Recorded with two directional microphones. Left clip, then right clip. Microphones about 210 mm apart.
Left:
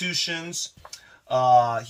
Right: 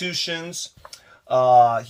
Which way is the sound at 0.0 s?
35° right (ahead or behind).